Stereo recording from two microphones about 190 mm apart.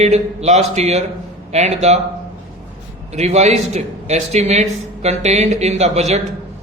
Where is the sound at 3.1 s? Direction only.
35° right (ahead or behind).